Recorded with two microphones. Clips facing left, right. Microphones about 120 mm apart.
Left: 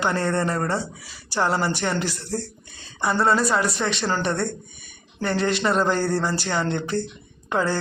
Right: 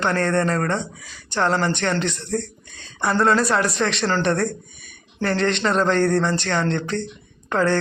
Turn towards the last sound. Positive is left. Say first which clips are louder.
# right 3 dB
turn(degrees=10)  # may be behind; listen again after turning